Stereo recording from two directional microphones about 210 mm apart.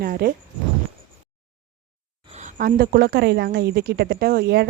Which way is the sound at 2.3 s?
40° right (ahead or behind).